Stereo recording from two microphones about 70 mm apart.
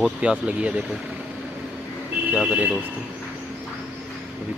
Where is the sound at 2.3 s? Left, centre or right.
Centre.